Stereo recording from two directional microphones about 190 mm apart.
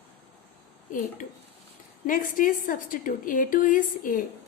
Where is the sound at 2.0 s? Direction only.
45° left (ahead or behind).